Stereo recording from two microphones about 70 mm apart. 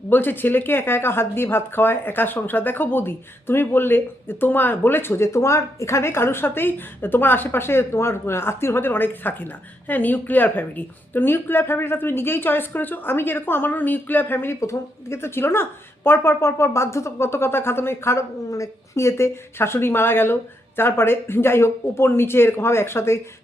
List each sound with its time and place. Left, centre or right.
0.1 s speech: left